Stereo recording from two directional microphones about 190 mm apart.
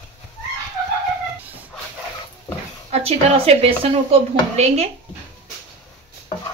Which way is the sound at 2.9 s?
30° right (ahead or behind).